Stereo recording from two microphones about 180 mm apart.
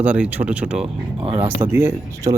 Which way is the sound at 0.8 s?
30° right (ahead or behind).